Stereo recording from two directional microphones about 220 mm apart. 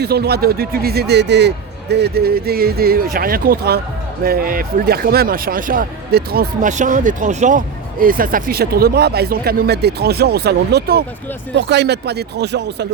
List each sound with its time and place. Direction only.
0.0 s speech: 45° right (ahead or behind)